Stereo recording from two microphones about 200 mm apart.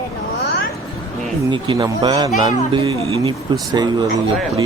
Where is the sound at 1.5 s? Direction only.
25° right (ahead or behind).